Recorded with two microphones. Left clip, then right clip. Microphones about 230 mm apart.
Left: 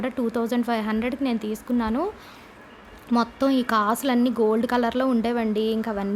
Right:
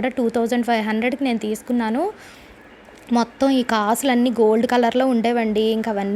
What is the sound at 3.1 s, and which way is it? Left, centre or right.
A woman's voice, centre.